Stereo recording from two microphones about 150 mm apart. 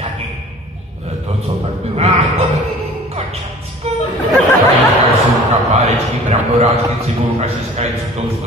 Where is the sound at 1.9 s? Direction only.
45° right (ahead or behind).